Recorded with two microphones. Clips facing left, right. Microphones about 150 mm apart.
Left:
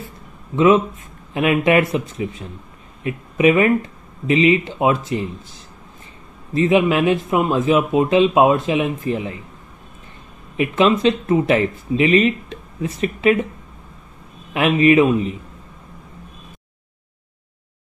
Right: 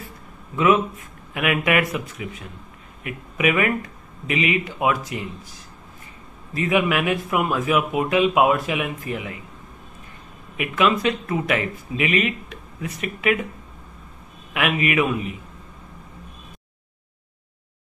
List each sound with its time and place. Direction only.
0.6 s speech: 25° left (ahead or behind)
6.5 s speech: 25° left (ahead or behind)
10.6 s speech: 25° left (ahead or behind)
14.5 s speech: 30° left (ahead or behind)